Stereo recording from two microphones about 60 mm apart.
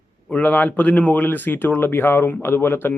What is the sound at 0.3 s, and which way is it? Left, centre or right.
Speech, left.